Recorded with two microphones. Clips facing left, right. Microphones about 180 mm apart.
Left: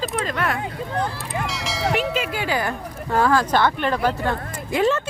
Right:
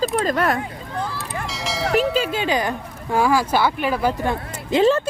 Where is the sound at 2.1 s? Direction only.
30° right (ahead or behind); by 4.3 s 10° right (ahead or behind).